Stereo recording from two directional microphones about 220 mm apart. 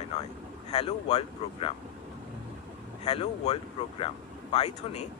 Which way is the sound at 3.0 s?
30° left (ahead or behind).